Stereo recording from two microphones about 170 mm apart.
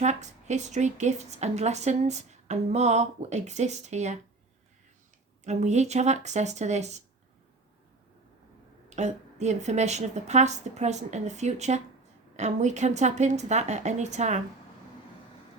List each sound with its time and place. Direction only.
0.0 s a woman's voice: 45° right (ahead or behind)
5.5 s a woman's voice: 40° right (ahead or behind)
8.9 s a woman's voice: 45° right (ahead or behind)